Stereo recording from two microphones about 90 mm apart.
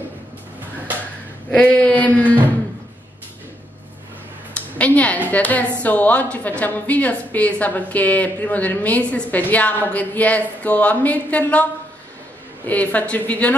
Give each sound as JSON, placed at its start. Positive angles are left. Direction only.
{"t": 1.5, "sound": "a woman's voice", "side_deg": 15}
{"t": 4.6, "sound": "a sound", "side_deg": 15}
{"t": 5.3, "sound": "a woman's voice", "side_deg": 15}
{"t": 12.6, "sound": "a woman's voice", "side_deg": 15}